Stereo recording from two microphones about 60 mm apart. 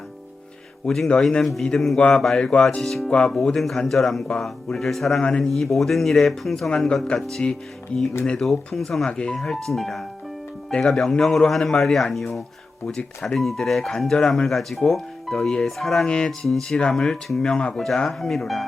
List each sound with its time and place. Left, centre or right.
0.9 s speech: centre
2.8 s speech: centre
3.1 s speech: centre
3.3 s speech: centre
9.0 s speech: centre
13.2 s speech: centre
16.0 s speech: centre